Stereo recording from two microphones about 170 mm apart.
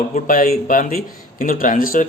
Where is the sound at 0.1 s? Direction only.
55° left (ahead or behind).